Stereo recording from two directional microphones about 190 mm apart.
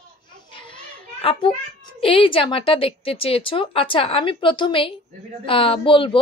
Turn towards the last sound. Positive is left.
turn(degrees=25)  # may be behind; listen again after turning